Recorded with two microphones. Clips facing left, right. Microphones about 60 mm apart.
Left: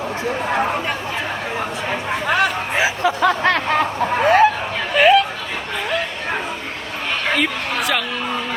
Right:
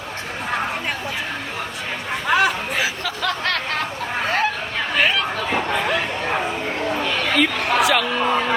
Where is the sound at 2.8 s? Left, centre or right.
Left.